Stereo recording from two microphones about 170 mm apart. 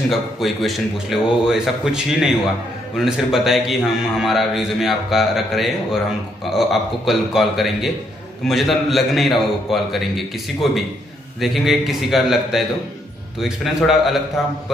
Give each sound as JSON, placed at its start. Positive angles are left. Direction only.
{"t": 0.1, "sound": "a man's voice", "side_deg": 0}
{"t": 13.8, "sound": "a man's voice", "side_deg": 0}